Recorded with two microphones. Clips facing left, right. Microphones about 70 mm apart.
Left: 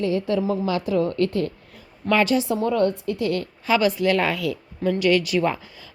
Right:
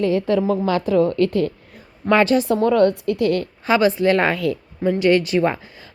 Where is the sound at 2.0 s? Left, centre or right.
Right.